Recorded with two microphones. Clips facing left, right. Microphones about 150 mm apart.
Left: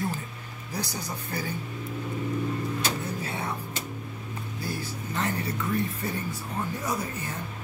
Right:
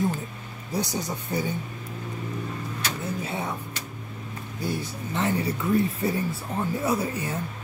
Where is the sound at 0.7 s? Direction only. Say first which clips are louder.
Right 5 dB; 25° right (ahead or behind).